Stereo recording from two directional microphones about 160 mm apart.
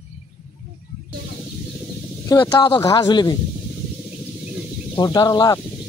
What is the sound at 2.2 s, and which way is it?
Speech, 20° left (ahead or behind).